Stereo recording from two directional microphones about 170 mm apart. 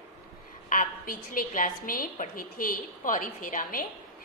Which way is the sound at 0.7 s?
55° left (ahead or behind).